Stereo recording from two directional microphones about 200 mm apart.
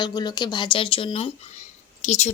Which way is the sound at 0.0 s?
20° left (ahead or behind).